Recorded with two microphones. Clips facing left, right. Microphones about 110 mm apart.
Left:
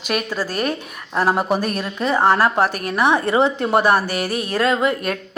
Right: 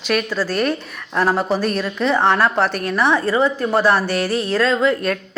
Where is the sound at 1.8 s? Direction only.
10° left (ahead or behind).